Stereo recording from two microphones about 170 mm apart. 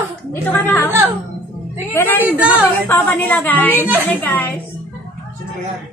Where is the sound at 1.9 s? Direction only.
10° left (ahead or behind).